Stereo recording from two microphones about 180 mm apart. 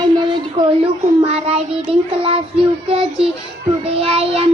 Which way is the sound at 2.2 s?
30° right (ahead or behind).